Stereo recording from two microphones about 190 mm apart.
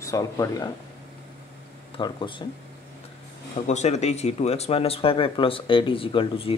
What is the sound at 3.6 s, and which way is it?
Speech, 35° left (ahead or behind).